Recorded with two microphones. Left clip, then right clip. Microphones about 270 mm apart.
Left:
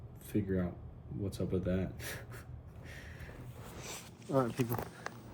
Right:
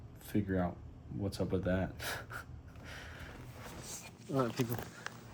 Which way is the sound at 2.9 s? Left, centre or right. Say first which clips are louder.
Right 3 dB; right.